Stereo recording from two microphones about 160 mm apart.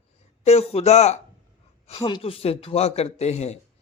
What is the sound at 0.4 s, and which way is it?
Speech, 40° left (ahead or behind).